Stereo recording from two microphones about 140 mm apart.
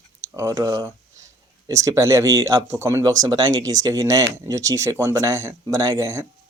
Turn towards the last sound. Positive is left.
turn(degrees=-25)  # may be behind; listen again after turning